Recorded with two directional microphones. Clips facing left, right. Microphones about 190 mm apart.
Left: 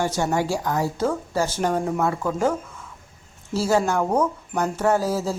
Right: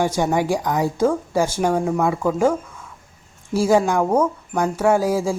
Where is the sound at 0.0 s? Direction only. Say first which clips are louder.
Right 3 dB; 15° right (ahead or behind).